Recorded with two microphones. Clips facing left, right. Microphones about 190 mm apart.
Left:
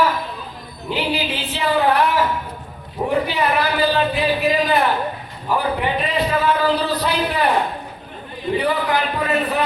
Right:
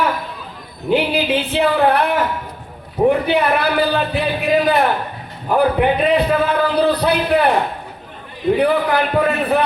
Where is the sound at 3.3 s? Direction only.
55° right (ahead or behind).